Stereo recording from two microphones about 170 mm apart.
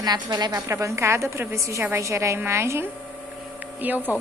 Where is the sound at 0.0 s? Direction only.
25° right (ahead or behind).